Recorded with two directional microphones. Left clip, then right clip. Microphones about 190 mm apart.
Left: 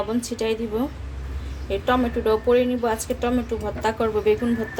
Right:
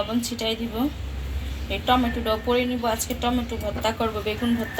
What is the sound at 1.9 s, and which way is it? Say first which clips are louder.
A woman's voice: left 1 dB; 60° left (ahead or behind).